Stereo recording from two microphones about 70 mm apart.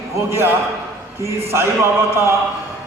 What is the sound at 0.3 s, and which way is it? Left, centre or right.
Speech, right.